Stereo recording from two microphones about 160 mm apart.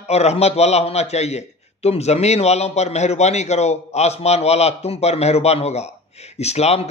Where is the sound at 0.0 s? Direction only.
40° left (ahead or behind).